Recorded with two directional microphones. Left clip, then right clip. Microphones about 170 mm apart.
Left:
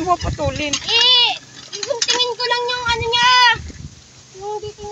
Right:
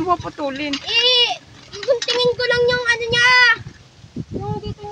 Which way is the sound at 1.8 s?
25° left (ahead or behind).